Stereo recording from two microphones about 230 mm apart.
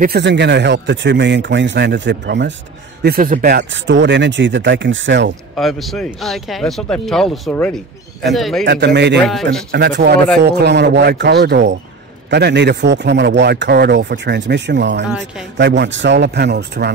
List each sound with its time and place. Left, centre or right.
0.0 s a man's voice: right
5.6 s speech: centre
8.6 s a man's voice: right
9.2 s speech: centre
9.7 s a man's voice: right